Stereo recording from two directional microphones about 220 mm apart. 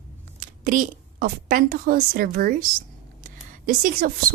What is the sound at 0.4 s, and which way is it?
A woman's voice, 40° right (ahead or behind).